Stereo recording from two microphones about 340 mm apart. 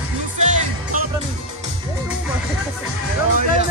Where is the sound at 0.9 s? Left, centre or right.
Right.